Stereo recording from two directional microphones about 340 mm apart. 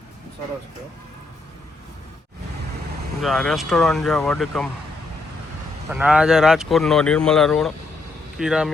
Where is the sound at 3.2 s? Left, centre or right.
Centre.